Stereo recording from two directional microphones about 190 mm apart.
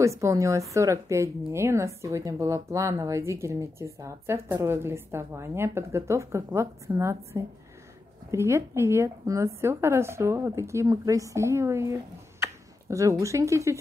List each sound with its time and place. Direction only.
0.0 s a woman's voice: 15° right (ahead or behind)